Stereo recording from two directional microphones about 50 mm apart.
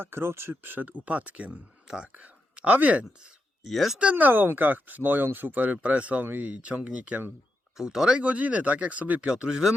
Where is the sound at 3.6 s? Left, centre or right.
Centre.